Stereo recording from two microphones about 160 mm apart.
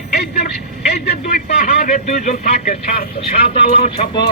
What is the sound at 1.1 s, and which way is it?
Speech, 65° left (ahead or behind).